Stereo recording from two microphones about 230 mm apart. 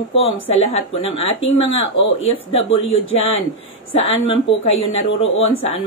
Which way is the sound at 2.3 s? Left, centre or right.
Left.